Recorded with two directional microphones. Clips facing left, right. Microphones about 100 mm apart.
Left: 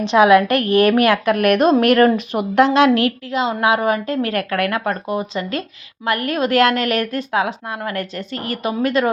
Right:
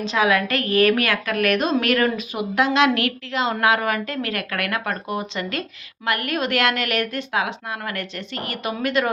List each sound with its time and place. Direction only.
0.0 s a woman's voice: 65° left (ahead or behind)
2.6 s a woman's voice: 30° left (ahead or behind)